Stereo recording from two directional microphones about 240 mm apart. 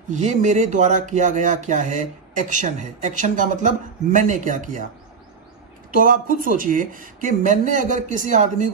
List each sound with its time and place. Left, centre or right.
0.1 s speech: right
6.0 s speech: right